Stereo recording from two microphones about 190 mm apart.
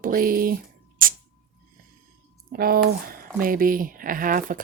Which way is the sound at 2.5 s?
50° right (ahead or behind).